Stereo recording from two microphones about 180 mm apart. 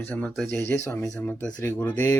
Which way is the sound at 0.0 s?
10° left (ahead or behind).